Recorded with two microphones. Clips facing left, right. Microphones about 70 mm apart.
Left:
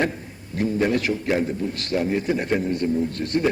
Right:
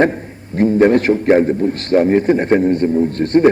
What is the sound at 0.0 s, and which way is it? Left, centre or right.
A man's voice, right.